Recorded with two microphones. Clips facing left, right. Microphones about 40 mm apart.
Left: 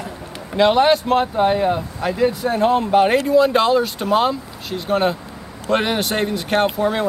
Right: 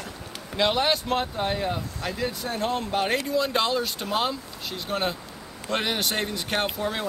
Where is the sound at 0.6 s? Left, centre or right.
Centre.